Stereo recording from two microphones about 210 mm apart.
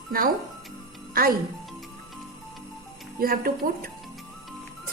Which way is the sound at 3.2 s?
45° right (ahead or behind).